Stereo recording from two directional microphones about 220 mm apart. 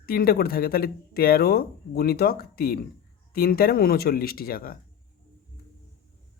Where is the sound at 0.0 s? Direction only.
45° left (ahead or behind).